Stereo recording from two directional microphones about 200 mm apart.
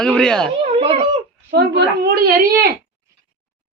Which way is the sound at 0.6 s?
30° right (ahead or behind).